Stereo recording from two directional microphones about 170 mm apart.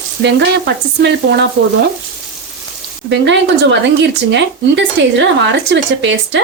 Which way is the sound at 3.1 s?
90° right.